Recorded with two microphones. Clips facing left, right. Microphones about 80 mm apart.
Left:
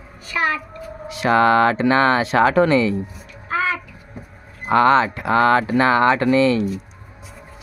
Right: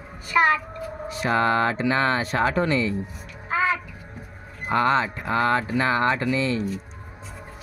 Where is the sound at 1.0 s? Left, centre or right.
Left.